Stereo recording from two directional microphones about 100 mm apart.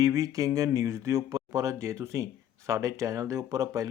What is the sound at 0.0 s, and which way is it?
Speech, 35° right (ahead or behind).